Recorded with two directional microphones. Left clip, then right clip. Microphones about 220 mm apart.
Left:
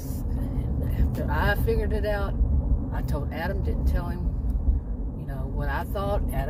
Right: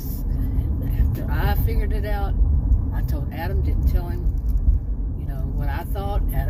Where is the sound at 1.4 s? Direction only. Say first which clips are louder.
Left 4 dB; 15° left (ahead or behind).